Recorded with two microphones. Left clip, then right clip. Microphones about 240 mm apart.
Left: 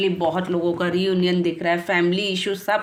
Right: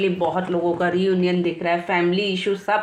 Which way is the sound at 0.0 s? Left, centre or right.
Left.